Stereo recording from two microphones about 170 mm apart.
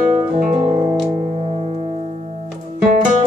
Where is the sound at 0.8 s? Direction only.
25° right (ahead or behind).